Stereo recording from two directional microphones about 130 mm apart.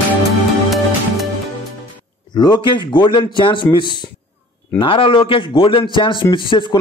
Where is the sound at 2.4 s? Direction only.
30° left (ahead or behind).